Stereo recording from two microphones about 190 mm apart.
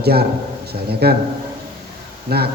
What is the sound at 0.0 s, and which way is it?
A man's voice, 55° right (ahead or behind).